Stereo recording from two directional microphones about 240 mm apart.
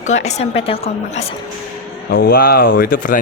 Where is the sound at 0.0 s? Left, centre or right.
Left.